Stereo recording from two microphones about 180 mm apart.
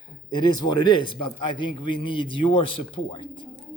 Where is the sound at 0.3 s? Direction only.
25° left (ahead or behind).